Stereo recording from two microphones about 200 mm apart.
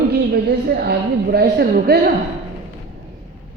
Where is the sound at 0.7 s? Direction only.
50° right (ahead or behind).